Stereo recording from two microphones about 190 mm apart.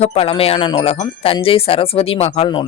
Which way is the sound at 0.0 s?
30° left (ahead or behind).